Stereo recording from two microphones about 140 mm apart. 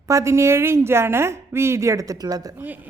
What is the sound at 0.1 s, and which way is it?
A woman's voice, 20° right (ahead or behind).